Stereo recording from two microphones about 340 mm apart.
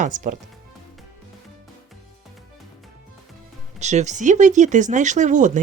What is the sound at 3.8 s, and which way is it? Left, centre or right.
Speech, right.